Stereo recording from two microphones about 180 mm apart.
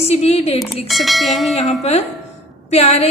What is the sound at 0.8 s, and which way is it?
Bell, centre (ahead or behind).